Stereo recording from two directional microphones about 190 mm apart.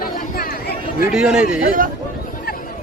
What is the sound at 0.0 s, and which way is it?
Chatter, 55° left (ahead or behind).